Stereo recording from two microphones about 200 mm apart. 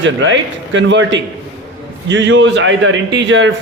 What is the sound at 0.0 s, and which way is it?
A man's voice, 70° right (ahead or behind).